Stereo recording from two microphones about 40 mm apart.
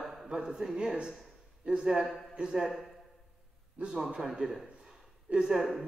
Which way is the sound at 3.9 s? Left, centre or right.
Right.